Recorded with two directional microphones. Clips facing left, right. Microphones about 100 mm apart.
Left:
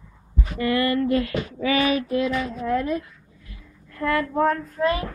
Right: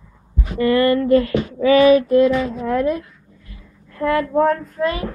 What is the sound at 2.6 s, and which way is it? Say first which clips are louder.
Speech: right 4 dB; 55° right (ahead or behind).